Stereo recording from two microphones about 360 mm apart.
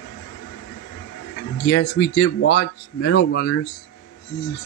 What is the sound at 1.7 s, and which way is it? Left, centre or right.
Speech, left.